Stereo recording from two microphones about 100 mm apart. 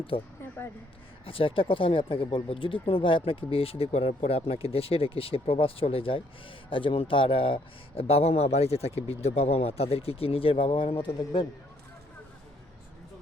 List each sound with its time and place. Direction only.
0.1 s speech: 70° left (ahead or behind)